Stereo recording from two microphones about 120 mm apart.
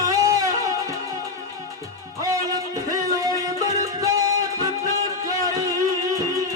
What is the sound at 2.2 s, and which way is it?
Music, 30° right (ahead or behind).